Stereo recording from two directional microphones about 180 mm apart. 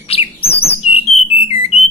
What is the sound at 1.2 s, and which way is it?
Whistle, 35° left (ahead or behind).